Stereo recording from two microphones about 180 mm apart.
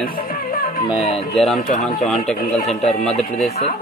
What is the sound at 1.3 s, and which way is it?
Speech, centre (ahead or behind).